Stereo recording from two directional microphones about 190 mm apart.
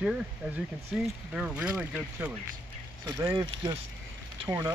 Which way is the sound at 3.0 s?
20° right (ahead or behind).